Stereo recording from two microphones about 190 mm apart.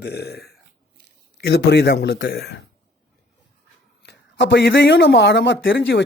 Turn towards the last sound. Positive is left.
turn(degrees=70)  # may be behind; listen again after turning